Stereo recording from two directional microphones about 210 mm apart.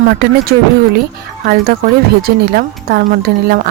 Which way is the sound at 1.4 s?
50° right (ahead or behind).